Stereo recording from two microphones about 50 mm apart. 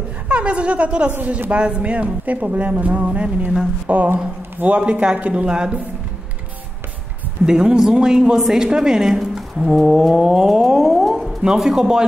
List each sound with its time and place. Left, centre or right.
0.3 s speech: right
7.4 s speech: centre
9.2 s a sound: centre
11.4 s speech: centre